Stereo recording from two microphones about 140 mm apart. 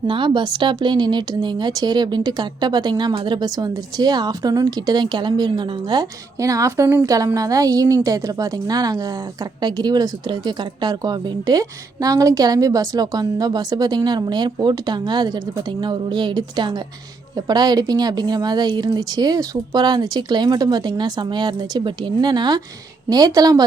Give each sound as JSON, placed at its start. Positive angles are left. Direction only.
{"t": 0.1, "sound": "a woman's voice", "side_deg": -35}